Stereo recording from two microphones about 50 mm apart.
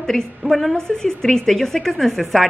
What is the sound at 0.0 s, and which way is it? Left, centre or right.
Speech, centre.